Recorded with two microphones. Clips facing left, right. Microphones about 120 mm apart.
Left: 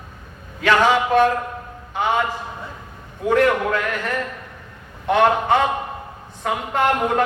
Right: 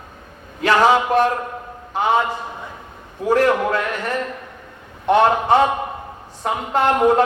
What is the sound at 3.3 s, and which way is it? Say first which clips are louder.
Speech: right 1 dB; 35° right (ahead or behind).